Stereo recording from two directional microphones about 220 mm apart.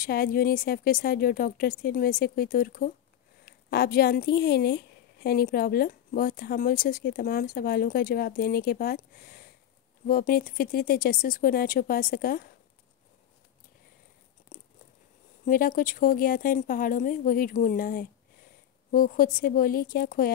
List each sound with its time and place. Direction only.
0.0 s a woman's voice: 40° left (ahead or behind)
15.4 s speech: 40° left (ahead or behind)